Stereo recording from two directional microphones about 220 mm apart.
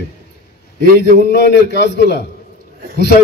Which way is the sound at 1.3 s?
50° left (ahead or behind).